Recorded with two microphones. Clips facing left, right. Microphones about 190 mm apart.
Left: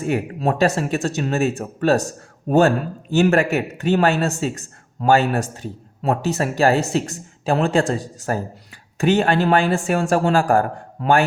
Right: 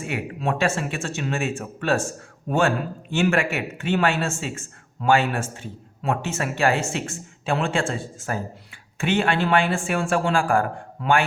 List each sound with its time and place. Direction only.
0.0 s speech: 40° left (ahead or behind)